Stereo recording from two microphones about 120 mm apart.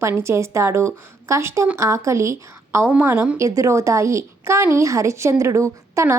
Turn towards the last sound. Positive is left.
turn(degrees=-25)  # may be behind; listen again after turning